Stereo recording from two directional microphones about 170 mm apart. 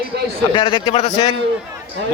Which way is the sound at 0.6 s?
25° left (ahead or behind).